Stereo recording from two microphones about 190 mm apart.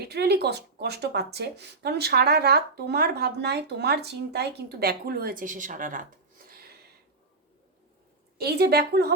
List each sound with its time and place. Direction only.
0.0 s speech: 60° right (ahead or behind)
8.4 s speech: 55° right (ahead or behind)